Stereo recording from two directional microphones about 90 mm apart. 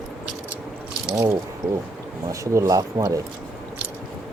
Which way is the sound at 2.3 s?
35° right (ahead or behind).